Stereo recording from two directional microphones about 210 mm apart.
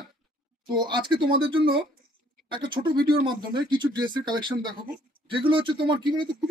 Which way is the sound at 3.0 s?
45° right (ahead or behind).